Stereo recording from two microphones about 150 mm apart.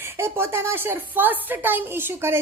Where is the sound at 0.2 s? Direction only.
15° right (ahead or behind).